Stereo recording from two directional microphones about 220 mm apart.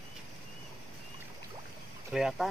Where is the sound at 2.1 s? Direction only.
Centre (ahead or behind).